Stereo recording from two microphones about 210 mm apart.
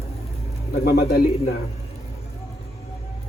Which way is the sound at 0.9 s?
50° left (ahead or behind).